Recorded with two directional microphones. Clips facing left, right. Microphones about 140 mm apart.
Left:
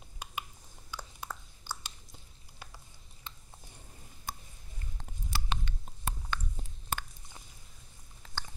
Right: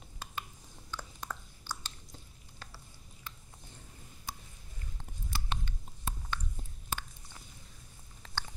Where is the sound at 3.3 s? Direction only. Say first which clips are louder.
Even; 20° left (ahead or behind).